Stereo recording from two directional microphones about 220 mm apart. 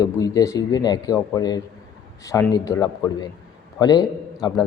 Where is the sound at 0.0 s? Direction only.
15° left (ahead or behind).